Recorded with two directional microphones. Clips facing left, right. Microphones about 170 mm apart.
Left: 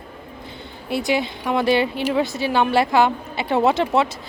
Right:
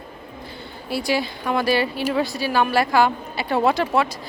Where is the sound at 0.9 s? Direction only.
20° left (ahead or behind).